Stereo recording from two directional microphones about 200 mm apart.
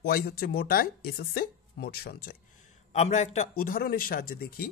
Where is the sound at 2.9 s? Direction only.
35° left (ahead or behind).